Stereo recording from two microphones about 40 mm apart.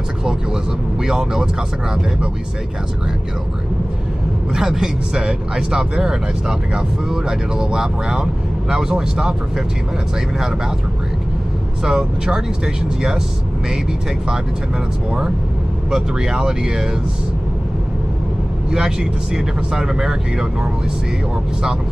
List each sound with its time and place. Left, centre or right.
0.2 s vehicle: centre
1.0 s speech: centre
4.5 s speech: centre
11.8 s speech: centre
15.9 s speech: centre
18.7 s speech: centre